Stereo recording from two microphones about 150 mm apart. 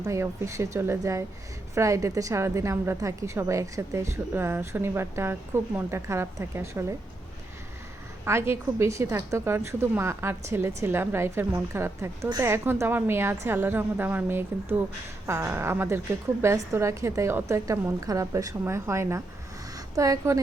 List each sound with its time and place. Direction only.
0.0 s a woman's voice: 20° right (ahead or behind)
8.2 s a woman's voice: 15° right (ahead or behind)